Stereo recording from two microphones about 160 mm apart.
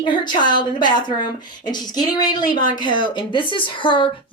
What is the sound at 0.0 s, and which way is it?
Speech, 30° left (ahead or behind).